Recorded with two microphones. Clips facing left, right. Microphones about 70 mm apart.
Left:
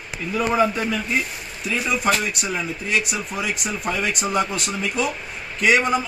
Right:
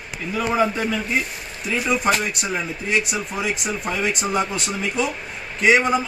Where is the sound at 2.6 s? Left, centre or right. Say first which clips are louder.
Right 1 dB; right.